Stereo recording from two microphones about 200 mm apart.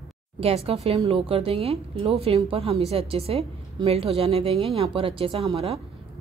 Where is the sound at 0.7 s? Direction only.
30° right (ahead or behind).